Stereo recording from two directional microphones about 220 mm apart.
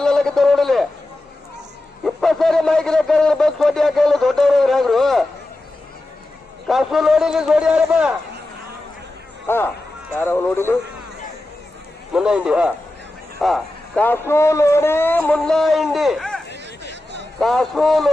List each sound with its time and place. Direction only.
0.0 s a man's voice: 5° left (ahead or behind)
2.0 s a man's voice: centre (ahead or behind)
6.7 s a man's voice: centre (ahead or behind)
9.5 s speech: 10° left (ahead or behind)
12.1 s a man's voice: 5° right (ahead or behind)
16.9 s a sound: 50° right (ahead or behind)
17.4 s a man's voice: centre (ahead or behind)